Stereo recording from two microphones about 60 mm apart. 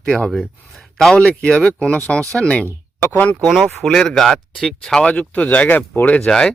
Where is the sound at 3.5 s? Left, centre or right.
Centre.